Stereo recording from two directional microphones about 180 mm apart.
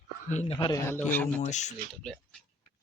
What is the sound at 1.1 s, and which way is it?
Speech, 10° left (ahead or behind).